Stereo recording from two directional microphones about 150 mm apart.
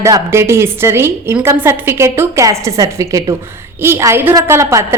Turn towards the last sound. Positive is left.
turn(degrees=-20)  # may be behind; listen again after turning